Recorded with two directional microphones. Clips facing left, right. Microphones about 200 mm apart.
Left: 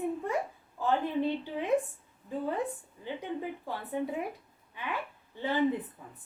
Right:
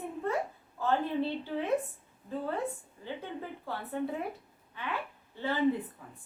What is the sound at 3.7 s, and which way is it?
A woman's voice, 15° left (ahead or behind).